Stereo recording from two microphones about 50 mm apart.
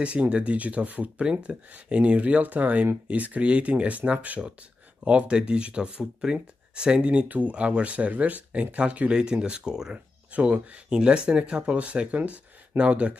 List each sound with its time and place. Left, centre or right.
0.0 s speech: right
9.1 s speech: centre
10.3 s speech: right